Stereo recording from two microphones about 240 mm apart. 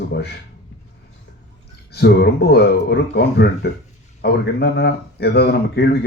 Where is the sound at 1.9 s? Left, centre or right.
Left.